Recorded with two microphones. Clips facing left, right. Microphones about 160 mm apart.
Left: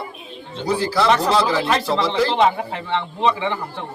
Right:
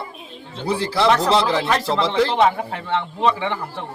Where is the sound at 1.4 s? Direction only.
Centre (ahead or behind).